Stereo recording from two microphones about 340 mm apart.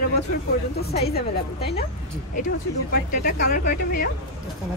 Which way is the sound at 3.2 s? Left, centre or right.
Left.